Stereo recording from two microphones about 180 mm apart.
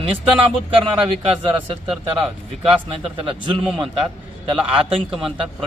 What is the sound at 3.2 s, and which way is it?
Speech, 30° right (ahead or behind).